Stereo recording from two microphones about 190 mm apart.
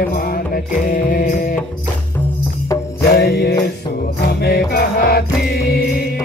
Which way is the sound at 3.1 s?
55° left (ahead or behind).